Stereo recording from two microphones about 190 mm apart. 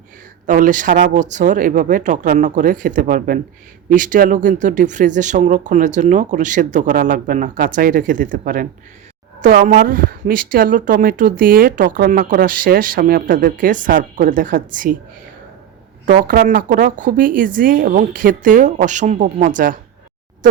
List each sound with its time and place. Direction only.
0.4 s speech: 45° right (ahead or behind)
16.0 s speech: 45° right (ahead or behind)